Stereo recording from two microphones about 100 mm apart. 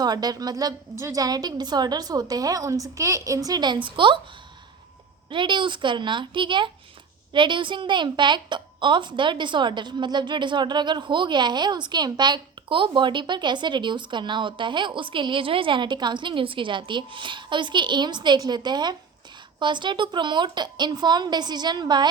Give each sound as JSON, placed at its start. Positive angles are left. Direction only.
{"t": 0.0, "sound": "a woman's voice", "side_deg": -40}
{"t": 3.8, "sound": "a woman's voice", "side_deg": -55}
{"t": 5.3, "sound": "a woman's voice", "side_deg": -55}